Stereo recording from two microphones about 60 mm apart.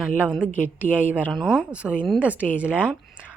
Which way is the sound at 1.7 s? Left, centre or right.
Centre.